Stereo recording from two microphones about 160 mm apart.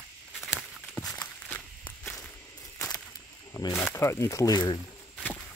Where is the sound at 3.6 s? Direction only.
25° left (ahead or behind).